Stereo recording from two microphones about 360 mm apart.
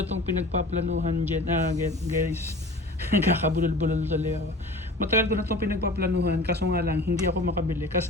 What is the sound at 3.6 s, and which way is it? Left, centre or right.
Speech, centre.